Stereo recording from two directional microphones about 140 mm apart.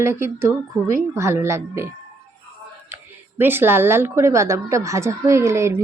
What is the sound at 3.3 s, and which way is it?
A woman's voice, 15° right (ahead or behind).